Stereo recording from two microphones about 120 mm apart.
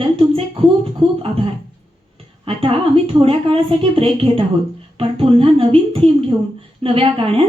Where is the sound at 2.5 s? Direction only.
50° right (ahead or behind).